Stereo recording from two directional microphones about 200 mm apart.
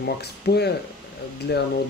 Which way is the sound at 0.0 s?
55° left (ahead or behind).